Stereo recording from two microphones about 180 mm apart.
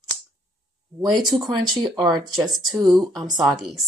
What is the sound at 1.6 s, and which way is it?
Speech, 25° right (ahead or behind).